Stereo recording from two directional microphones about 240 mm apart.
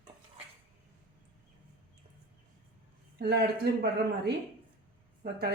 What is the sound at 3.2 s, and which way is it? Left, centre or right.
Speech, right.